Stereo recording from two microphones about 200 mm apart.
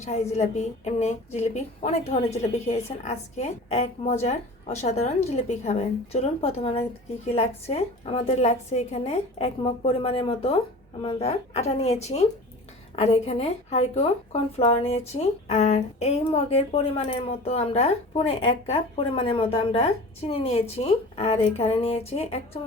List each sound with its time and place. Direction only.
0.0 s a woman's voice: 35° left (ahead or behind)